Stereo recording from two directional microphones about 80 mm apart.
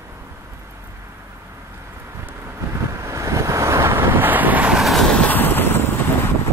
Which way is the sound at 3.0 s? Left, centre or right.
Right.